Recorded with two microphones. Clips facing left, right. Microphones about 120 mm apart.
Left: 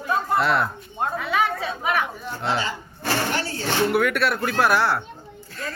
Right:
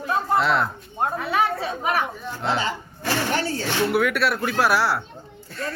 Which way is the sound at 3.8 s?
Centre (ahead or behind).